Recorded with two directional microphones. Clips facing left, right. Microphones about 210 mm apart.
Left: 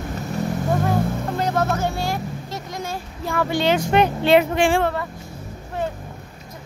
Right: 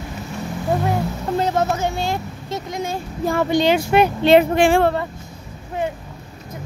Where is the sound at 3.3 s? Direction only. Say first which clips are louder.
Right 2 dB; 15° right (ahead or behind).